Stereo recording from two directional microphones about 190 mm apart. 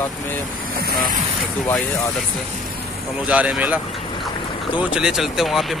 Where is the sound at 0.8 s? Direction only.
55° right (ahead or behind).